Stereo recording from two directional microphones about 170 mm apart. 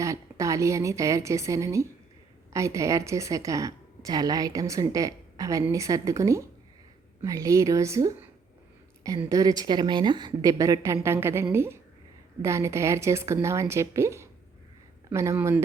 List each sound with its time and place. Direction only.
0.0 s a woman's voice: 20° right (ahead or behind)